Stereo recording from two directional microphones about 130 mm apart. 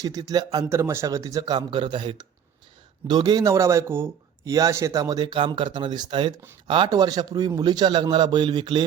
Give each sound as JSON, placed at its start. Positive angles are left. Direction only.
{"t": 0.0, "sound": "a man's voice", "side_deg": -25}